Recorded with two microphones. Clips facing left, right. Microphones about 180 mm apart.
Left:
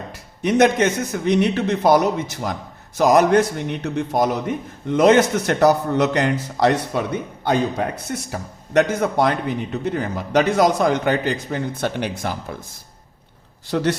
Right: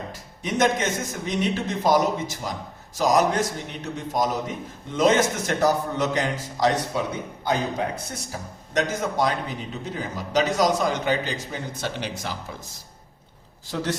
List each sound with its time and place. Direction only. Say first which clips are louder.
0.1 s a man's voice: left 13 dB; 65° left (ahead or behind)
8.3 s a man's voice: left 7 dB; 60° left (ahead or behind)
13.7 s speech: left 7 dB; 65° left (ahead or behind)